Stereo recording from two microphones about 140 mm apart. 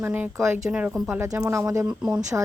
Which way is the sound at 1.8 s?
10° right (ahead or behind).